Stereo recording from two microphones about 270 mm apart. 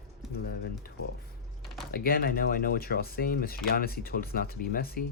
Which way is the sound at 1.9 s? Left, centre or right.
Left.